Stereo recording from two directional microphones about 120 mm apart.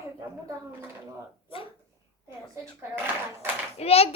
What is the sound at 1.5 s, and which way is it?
Speech, 50° left (ahead or behind).